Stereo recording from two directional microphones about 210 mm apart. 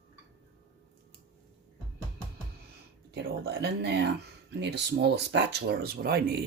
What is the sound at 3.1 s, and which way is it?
Speech, 50° right (ahead or behind).